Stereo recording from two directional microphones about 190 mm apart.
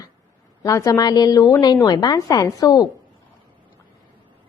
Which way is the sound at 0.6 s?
15° left (ahead or behind).